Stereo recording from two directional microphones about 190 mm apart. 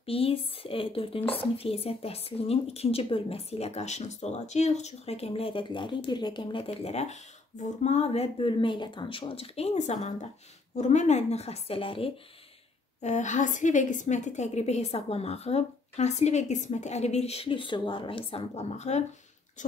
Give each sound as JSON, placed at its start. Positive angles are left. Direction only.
{"t": 0.0, "sound": "speech", "side_deg": 30}
{"t": 13.0, "sound": "speech", "side_deg": 40}